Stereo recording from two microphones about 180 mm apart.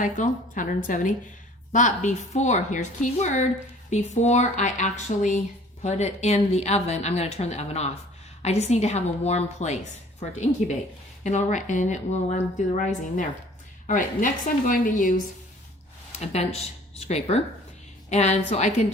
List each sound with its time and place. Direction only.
0.0 s a woman's voice: 45° left (ahead or behind)
16.1 s a woman's voice: 35° left (ahead or behind)